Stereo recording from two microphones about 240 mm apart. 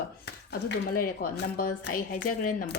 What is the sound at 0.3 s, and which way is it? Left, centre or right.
Speech, left.